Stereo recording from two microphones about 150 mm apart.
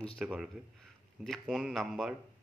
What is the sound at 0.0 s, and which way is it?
Speech, centre (ahead or behind).